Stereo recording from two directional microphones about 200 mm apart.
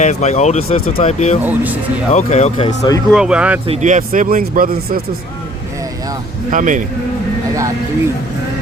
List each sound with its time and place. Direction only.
0.0 s speech: 35° left (ahead or behind)
1.5 s speech: 10° right (ahead or behind)
2.1 s speech: 30° left (ahead or behind)
2.6 s speech: 20° left (ahead or behind)
3.1 s speech: 5° right (ahead or behind)
3.7 s speech: 40° right (ahead or behind)
6.5 s speech: 40° right (ahead or behind)